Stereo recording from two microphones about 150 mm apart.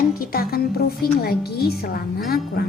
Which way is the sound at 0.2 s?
90° left.